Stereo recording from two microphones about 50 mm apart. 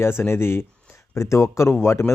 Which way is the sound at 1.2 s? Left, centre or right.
Left.